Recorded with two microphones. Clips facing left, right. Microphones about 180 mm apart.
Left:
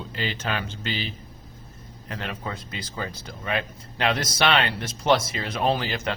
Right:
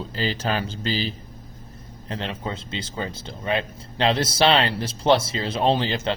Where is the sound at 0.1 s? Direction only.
35° right (ahead or behind).